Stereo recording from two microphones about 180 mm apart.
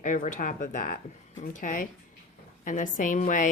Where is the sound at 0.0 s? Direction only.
45° left (ahead or behind).